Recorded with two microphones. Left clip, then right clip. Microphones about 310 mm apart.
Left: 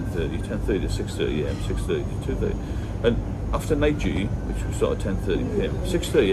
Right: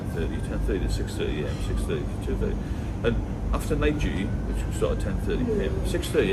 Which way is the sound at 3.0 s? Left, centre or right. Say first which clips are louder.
Left 4 dB; left.